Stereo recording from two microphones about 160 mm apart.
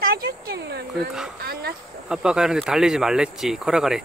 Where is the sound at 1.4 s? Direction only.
75° right (ahead or behind).